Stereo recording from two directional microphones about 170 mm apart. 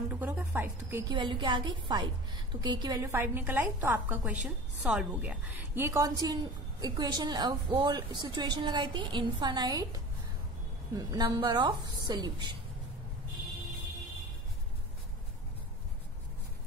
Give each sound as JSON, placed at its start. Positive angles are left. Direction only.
{"t": 0.1, "sound": "music", "side_deg": -10}
{"t": 0.5, "sound": "speech", "side_deg": -15}
{"t": 1.1, "sound": "a woman's voice", "side_deg": -25}